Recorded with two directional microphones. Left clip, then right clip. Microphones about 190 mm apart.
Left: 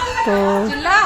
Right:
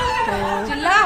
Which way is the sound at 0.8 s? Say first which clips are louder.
Even; centre (ahead or behind).